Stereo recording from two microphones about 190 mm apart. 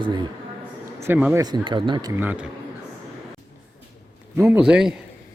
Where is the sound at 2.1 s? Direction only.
10° right (ahead or behind).